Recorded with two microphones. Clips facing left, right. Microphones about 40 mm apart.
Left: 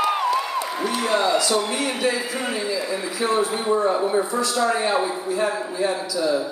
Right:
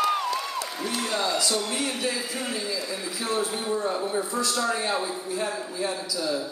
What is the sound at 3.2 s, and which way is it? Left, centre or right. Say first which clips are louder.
A man's voice: left 7 dB; left.